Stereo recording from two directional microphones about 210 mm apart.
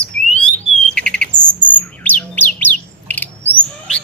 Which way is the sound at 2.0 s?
10° left (ahead or behind).